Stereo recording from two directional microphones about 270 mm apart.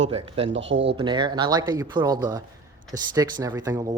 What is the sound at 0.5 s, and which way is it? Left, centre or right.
Speech, right.